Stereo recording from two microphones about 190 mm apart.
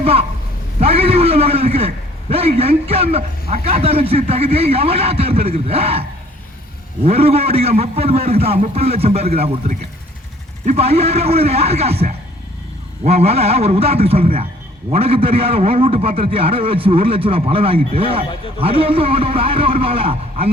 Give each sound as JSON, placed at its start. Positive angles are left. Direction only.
{"t": 0.0, "sound": "a woman's voice", "side_deg": -30}